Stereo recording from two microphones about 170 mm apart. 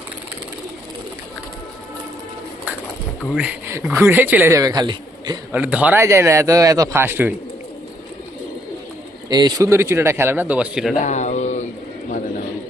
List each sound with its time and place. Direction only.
3.3 s speech: 10° right (ahead or behind); by 5.4 s 25° right (ahead or behind)
5.5 s speech: 10° right (ahead or behind)
9.3 s speech: 20° right (ahead or behind); by 10.9 s 5° right (ahead or behind)
10.9 s a sound: 45° left (ahead or behind)